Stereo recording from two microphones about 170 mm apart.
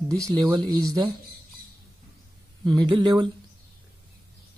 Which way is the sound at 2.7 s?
25° right (ahead or behind).